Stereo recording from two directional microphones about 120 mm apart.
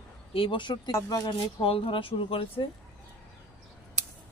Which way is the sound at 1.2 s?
50° left (ahead or behind).